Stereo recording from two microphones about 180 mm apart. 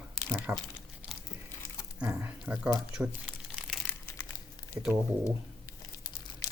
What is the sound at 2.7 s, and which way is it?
Crumpling, 5° right (ahead or behind).